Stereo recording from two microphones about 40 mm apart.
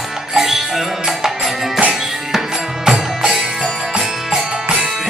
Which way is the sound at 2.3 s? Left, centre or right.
Centre.